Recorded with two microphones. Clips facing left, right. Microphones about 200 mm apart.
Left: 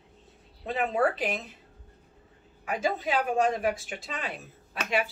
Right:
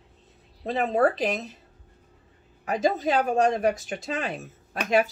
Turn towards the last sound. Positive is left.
turn(degrees=-45)  # may be behind; listen again after turning